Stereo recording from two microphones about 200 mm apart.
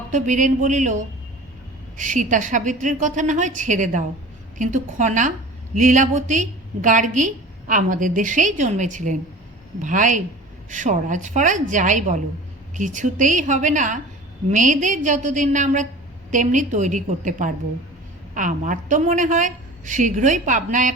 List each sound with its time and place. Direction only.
0.1 s a woman's voice: 40° right (ahead or behind)